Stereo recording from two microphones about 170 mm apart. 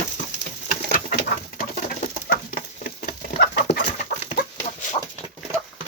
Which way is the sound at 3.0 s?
65° left (ahead or behind).